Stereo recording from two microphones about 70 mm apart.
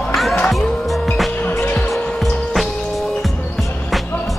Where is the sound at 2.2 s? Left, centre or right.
Centre.